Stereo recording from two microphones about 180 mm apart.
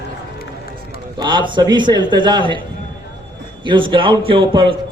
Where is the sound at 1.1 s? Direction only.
25° right (ahead or behind).